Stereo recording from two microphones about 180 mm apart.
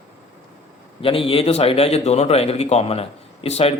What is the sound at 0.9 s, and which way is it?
Speech, 30° left (ahead or behind).